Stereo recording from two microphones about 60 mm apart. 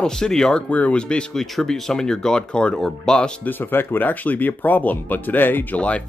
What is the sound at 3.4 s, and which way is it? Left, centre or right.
Speech, left.